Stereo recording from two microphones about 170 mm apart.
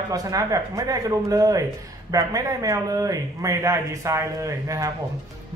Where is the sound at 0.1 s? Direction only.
20° right (ahead or behind).